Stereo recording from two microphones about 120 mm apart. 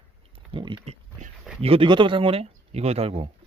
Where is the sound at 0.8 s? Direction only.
65° right (ahead or behind).